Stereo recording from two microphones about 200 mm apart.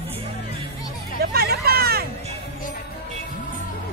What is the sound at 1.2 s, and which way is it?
Hubbub, 50° right (ahead or behind).